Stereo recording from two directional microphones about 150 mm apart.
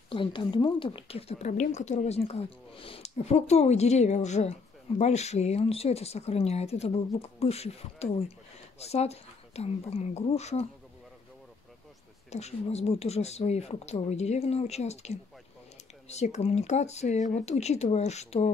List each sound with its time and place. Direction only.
0.1 s speech: 35° left (ahead or behind)
12.3 s speech: 45° left (ahead or behind)